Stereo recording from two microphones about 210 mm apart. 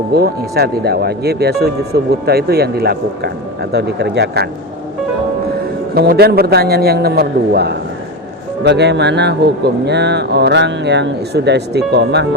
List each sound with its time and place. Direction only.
0.1 s speech: 50° right (ahead or behind)
5.9 s speech: 50° right (ahead or behind)